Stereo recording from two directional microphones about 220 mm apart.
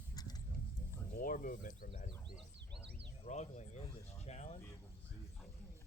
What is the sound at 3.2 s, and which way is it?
Speech, 30° left (ahead or behind).